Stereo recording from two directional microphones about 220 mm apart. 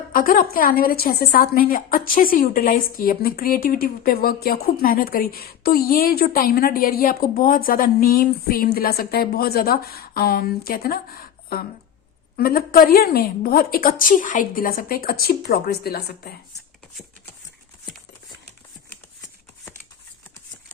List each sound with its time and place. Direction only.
0.1 s a woman's voice: 40° left (ahead or behind)